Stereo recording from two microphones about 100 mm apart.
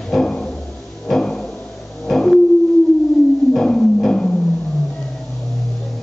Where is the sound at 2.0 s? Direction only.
5° left (ahead or behind).